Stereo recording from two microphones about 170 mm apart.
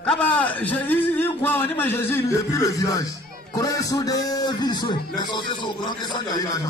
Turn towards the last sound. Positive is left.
turn(degrees=20)  # may be behind; listen again after turning